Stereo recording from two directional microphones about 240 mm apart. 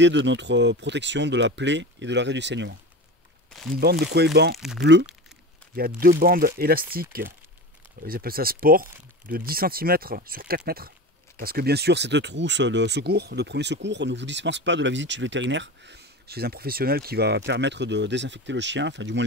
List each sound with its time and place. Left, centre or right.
0.0 s speech: right
3.8 s speech: right
4.6 s speech: centre
5.8 s speech: right